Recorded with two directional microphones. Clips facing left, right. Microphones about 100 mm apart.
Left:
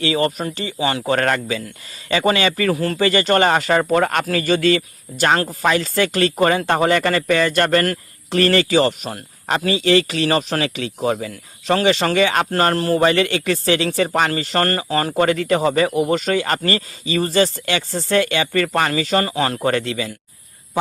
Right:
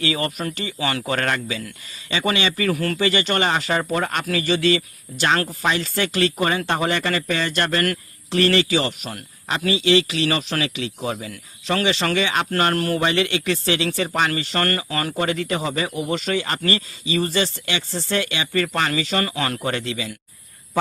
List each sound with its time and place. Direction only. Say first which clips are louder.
0.0 s speech: left 5 dB; 30° left (ahead or behind)
0.8 s speech: left 5 dB; 20° left (ahead or behind)
1.1 s speech: left 5 dB; 40° left (ahead or behind)
2.7 s speech: left 2 dB; 25° left (ahead or behind)
3.0 s speech: left 7 dB; 40° left (ahead or behind)
15.2 s speech: left 7 dB; 45° left (ahead or behind); by 19.6 s 30° left (ahead or behind)
19.6 s speech: left 5 dB; 45° left (ahead or behind)